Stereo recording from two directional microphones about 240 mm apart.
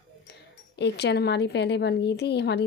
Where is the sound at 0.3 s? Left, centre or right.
Left.